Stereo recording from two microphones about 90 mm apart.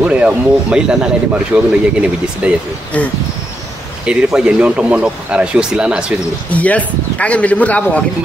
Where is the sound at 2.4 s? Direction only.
15° right (ahead or behind).